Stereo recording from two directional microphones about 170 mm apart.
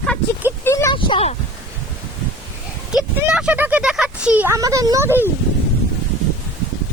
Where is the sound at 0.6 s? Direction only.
20° left (ahead or behind).